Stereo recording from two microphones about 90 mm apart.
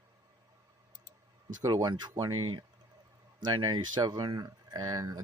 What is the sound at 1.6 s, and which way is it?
Speech, 40° right (ahead or behind).